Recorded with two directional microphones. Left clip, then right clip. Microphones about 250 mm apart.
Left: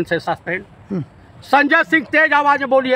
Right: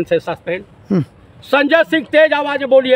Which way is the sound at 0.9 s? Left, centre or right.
Right.